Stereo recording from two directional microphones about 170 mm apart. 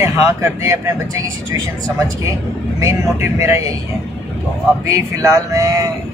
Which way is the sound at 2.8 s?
15° right (ahead or behind).